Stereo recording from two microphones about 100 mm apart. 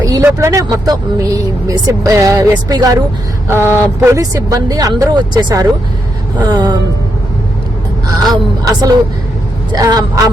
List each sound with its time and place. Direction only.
0.0 s vehicle: 35° right (ahead or behind)
0.3 s speech: 30° right (ahead or behind)
3.5 s a sound: 25° right (ahead or behind)
4.2 s speech: 35° right (ahead or behind)
6.4 s a sound: 45° right (ahead or behind)
8.2 s speech: 40° right (ahead or behind)